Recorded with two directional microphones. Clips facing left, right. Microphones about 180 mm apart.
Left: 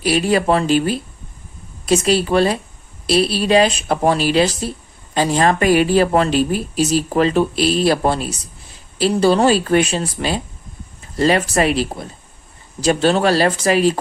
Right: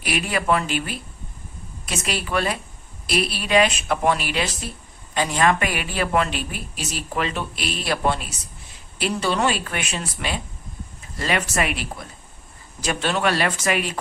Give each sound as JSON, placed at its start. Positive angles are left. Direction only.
{"t": 0.0, "sound": "speech", "side_deg": 30}